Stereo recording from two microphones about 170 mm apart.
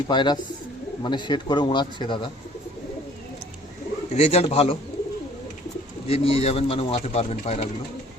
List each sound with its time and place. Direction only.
0.1 s a man's voice: 25° left (ahead or behind)
4.1 s speech: 40° left (ahead or behind)
6.1 s speech: 35° left (ahead or behind)